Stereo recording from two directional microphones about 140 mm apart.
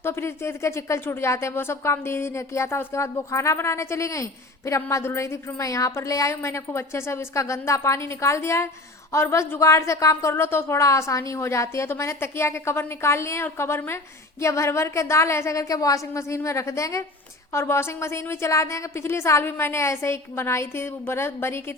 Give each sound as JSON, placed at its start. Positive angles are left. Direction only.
{"t": 0.0, "sound": "speech", "side_deg": 15}